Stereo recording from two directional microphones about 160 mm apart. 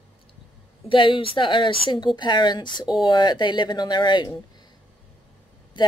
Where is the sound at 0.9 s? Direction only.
35° left (ahead or behind).